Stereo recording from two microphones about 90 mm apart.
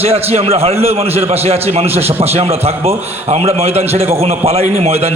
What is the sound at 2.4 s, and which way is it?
A man's voice, 90° right.